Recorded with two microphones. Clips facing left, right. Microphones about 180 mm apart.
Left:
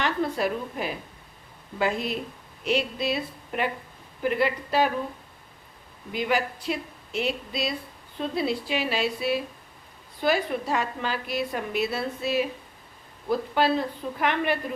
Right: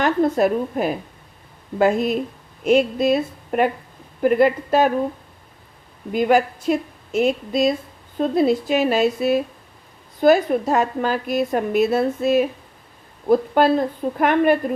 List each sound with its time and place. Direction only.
0.0 s a woman's voice: 45° right (ahead or behind)
6.1 s a woman's voice: 50° right (ahead or behind)